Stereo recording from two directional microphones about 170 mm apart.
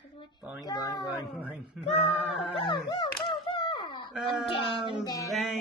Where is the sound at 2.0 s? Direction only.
10° left (ahead or behind).